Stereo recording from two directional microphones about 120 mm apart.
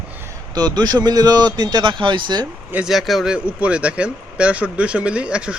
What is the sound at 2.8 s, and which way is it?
Speech, centre (ahead or behind).